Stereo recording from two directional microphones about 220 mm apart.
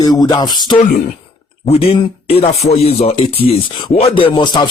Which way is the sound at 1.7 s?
25° left (ahead or behind).